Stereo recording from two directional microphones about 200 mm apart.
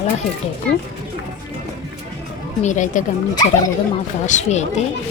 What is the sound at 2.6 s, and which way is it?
Speech, 40° left (ahead or behind).